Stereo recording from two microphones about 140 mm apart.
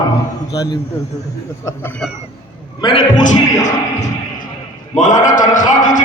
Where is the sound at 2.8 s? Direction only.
30° left (ahead or behind).